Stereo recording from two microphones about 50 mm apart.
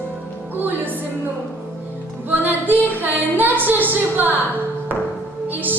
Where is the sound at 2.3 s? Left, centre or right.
Right.